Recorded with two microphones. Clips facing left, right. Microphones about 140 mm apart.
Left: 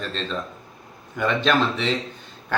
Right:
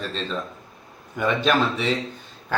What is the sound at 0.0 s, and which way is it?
Speech, 5° right (ahead or behind).